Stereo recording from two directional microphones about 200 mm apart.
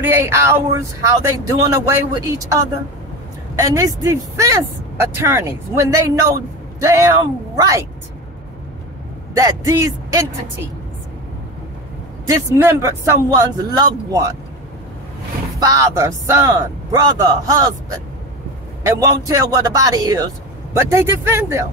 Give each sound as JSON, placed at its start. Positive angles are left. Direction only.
{"t": 0.0, "sound": "speech", "side_deg": -10}
{"t": 9.3, "sound": "speech", "side_deg": -15}
{"t": 12.3, "sound": "speech", "side_deg": -15}
{"t": 15.6, "sound": "speech", "side_deg": -15}
{"t": 18.9, "sound": "speech", "side_deg": -15}